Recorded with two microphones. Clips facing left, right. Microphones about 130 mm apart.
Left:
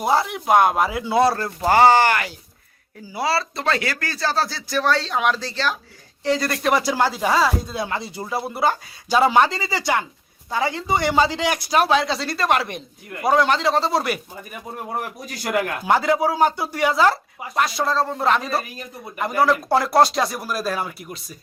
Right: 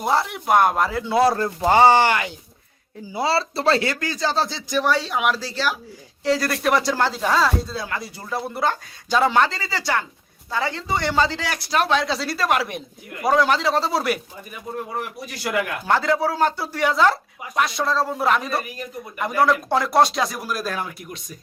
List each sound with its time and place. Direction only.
0.0 s speech: centre (ahead or behind)
1.2 s speech: 15° right (ahead or behind)
4.0 s speech: 15° right (ahead or behind); by 7.8 s 10° left (ahead or behind)
7.8 s speech: 25° left (ahead or behind)
8.3 s speech: 10° left (ahead or behind)
15.9 s speech: 15° left (ahead or behind)